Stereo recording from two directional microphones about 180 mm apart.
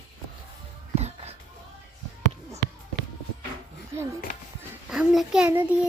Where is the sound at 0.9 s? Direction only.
35° right (ahead or behind).